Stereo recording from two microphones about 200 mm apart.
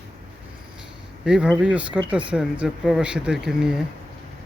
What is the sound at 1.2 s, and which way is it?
Speech, 5° right (ahead or behind).